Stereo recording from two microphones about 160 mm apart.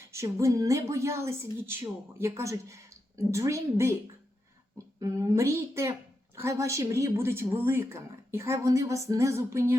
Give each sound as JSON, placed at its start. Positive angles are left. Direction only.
{"t": 0.1, "sound": "a woman's voice", "side_deg": -20}